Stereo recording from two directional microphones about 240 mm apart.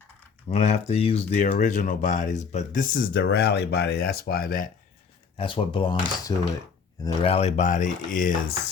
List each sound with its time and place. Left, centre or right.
0.5 s speech: left
5.4 s speech: left